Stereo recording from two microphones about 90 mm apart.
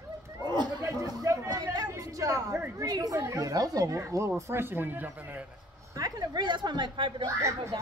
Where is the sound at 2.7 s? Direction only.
40° right (ahead or behind); by 5.4 s 20° right (ahead or behind).